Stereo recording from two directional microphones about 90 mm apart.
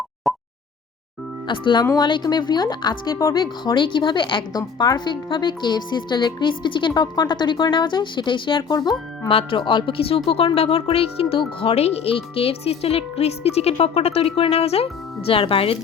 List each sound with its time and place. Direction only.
0.3 s a sound: centre (ahead or behind)
1.5 s speech: 60° left (ahead or behind)
4.5 s speech: 50° left (ahead or behind); by 8.8 s 65° left (ahead or behind)
8.8 s speech: 50° left (ahead or behind)
9.3 s speech: 70° left (ahead or behind)
10.2 s speech: 90° left